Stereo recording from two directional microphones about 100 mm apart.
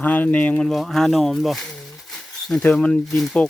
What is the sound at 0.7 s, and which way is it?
Speech, centre (ahead or behind).